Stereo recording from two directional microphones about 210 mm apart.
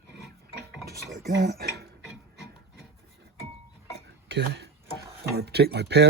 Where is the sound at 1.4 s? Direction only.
50° right (ahead or behind).